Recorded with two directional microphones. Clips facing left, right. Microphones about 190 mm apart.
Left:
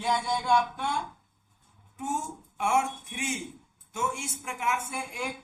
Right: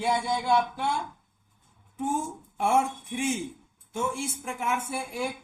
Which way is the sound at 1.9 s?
30° right (ahead or behind).